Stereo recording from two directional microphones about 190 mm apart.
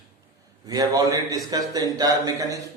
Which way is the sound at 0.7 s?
20° right (ahead or behind).